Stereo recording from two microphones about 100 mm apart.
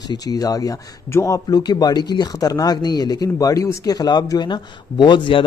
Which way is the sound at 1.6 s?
45° left (ahead or behind).